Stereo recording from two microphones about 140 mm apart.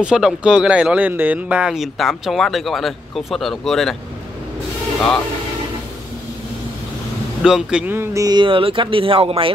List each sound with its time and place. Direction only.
0.0 s speech: 5° right (ahead or behind)
7.4 s speech: 5° right (ahead or behind); by 9.5 s 40° right (ahead or behind)